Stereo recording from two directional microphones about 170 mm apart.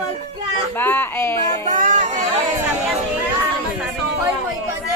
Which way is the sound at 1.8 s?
45° right (ahead or behind).